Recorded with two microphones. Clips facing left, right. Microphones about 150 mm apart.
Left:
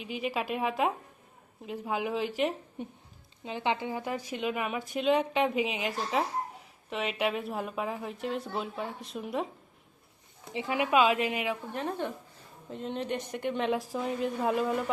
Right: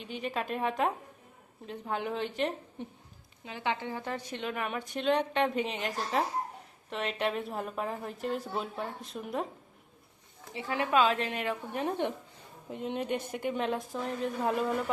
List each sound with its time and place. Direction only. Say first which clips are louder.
0.0 s a woman's voice: left 2 dB; 5° left (ahead or behind)
3.4 s a woman's voice: left 3 dB; 20° left (ahead or behind); by 9.5 s centre (ahead or behind)
10.5 s a woman's voice: left 2 dB; 15° left (ahead or behind)
11.7 s speech: right 2 dB; 15° right (ahead or behind); by 14.8 s 5° left (ahead or behind)